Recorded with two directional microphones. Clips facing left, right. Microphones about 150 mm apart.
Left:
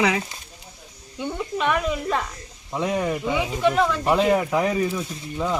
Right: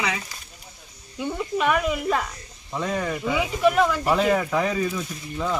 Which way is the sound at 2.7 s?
15° left (ahead or behind).